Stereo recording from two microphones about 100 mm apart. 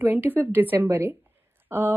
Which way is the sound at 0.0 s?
20° right (ahead or behind).